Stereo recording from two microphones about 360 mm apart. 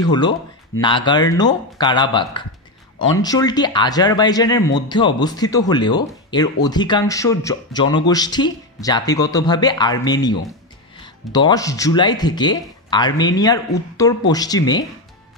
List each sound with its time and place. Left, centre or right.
0.0 s speech: centre